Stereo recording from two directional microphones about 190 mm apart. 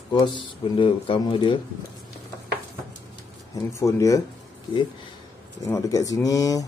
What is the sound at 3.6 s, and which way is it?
Speech, 15° left (ahead or behind).